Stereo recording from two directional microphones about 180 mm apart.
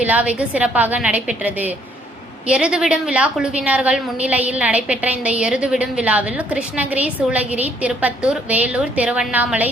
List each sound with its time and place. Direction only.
0.0 s a woman's voice: 10° right (ahead or behind)